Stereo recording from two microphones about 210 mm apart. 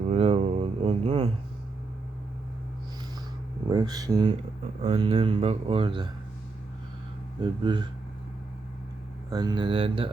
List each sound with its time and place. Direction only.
0.1 s a sound: 30° right (ahead or behind)
3.7 s speech: 20° right (ahead or behind)
7.4 s speech: 20° right (ahead or behind)
9.3 s speech: 20° right (ahead or behind)